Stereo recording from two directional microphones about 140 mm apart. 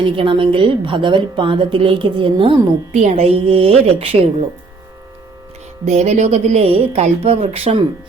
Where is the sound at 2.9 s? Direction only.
55° right (ahead or behind).